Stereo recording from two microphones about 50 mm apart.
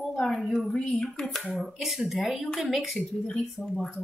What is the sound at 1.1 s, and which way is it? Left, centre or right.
Speech, centre.